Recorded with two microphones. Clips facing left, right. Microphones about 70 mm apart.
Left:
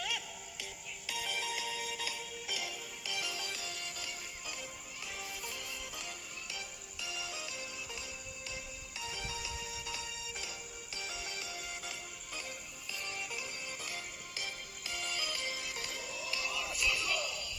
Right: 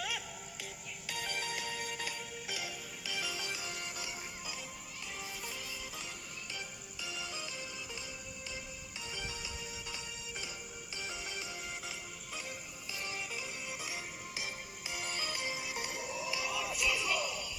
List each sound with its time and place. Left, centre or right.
0.6 s music: centre
3.7 s music: centre
7.0 s music: centre
9.0 s music: centre